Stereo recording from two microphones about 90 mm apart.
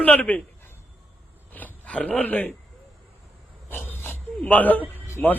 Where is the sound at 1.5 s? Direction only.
15° left (ahead or behind).